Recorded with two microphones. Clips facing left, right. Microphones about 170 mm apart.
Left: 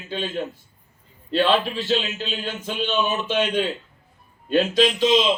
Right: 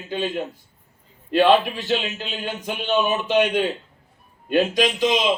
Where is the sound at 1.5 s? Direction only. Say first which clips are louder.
Right 4 dB; 15° right (ahead or behind).